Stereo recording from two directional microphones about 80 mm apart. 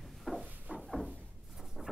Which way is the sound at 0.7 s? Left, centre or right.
Centre.